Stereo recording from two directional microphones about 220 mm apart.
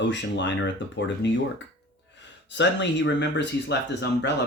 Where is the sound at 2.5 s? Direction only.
55° left (ahead or behind).